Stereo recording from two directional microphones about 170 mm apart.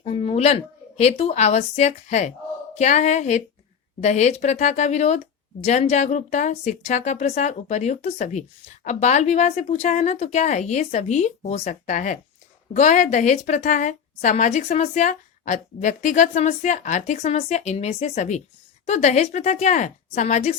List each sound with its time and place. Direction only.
0.0 s a woman's voice: 35° left (ahead or behind)